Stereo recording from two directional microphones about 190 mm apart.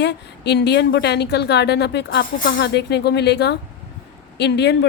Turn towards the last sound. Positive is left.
turn(degrees=65)  # may be behind; listen again after turning